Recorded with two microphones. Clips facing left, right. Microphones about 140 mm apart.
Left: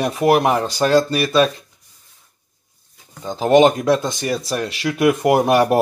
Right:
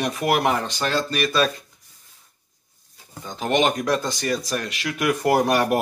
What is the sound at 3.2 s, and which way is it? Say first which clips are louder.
Speech: left 8 dB; 30° left (ahead or behind).